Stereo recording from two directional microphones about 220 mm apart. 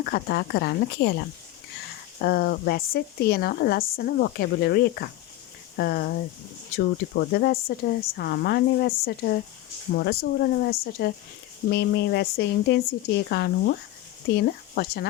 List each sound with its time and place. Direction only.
0.0 s speech: 45° left (ahead or behind)
2.2 s speech: 45° left (ahead or behind)